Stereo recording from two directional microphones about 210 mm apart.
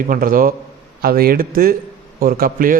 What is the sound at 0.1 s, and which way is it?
A man's voice, 40° right (ahead or behind).